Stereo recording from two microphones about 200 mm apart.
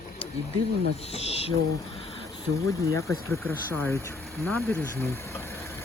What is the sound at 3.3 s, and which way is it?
Speech, 10° left (ahead or behind).